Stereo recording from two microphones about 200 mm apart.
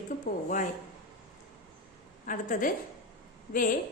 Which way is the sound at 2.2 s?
45° left (ahead or behind).